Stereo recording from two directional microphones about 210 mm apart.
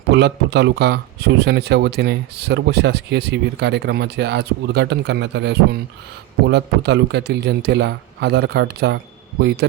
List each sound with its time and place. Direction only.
0.1 s speech: 55° right (ahead or behind)